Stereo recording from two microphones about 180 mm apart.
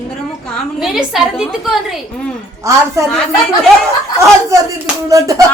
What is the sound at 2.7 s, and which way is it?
Speech, 15° right (ahead or behind).